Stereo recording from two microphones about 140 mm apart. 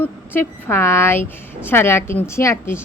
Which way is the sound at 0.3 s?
15° left (ahead or behind).